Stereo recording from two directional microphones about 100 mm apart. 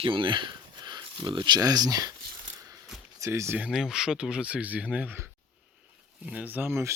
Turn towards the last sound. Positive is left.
turn(degrees=-25)  # may be behind; listen again after turning